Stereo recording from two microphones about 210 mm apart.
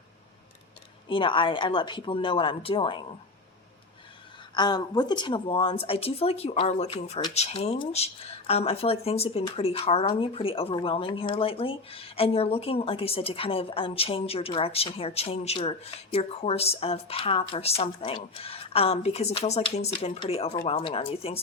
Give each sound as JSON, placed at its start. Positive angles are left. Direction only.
{"t": 1.0, "sound": "speech", "side_deg": 25}
{"t": 4.5, "sound": "speech", "side_deg": 20}